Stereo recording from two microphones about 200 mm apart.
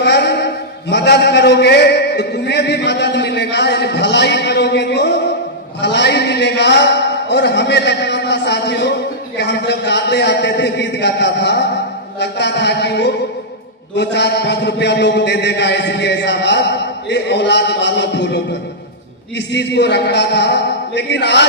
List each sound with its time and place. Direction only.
0.0 s a sound: 55° left (ahead or behind)
9.4 s a man's voice: 60° left (ahead or behind)
19.5 s a man's voice: 60° left (ahead or behind)